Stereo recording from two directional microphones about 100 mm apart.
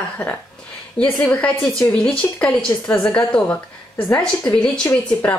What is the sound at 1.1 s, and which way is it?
A woman's voice, 10° left (ahead or behind).